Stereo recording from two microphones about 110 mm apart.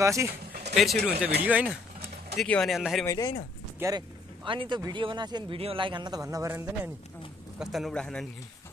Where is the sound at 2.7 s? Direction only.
Centre (ahead or behind).